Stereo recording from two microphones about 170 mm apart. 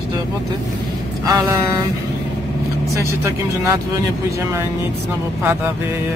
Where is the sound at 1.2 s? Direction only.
20° right (ahead or behind).